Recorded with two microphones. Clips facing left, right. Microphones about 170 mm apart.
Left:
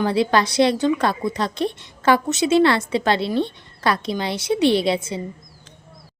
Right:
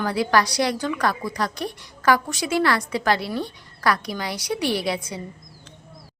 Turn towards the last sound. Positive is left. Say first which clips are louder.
# left 6 dB
turn(degrees=25)  # may be behind; listen again after turning